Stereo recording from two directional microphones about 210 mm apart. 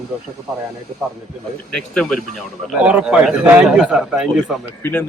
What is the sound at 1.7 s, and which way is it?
A man's voice, 5° left (ahead or behind).